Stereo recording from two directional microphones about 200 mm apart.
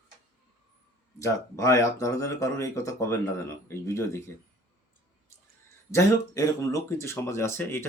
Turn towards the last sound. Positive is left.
turn(degrees=10)  # may be behind; listen again after turning